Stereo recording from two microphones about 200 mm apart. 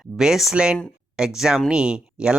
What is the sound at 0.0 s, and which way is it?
Speech, 5° right (ahead or behind).